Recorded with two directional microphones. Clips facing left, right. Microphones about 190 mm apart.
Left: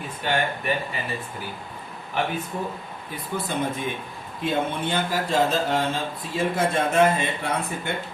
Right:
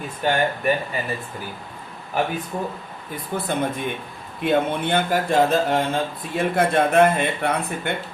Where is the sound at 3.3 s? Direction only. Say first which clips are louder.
Right 3 dB; 50° right (ahead or behind).